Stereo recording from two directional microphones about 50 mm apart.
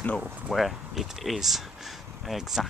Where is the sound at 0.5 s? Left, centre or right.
Centre.